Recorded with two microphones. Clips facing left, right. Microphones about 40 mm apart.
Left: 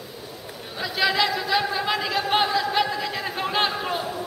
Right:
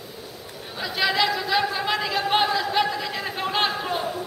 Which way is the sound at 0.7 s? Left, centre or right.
Centre.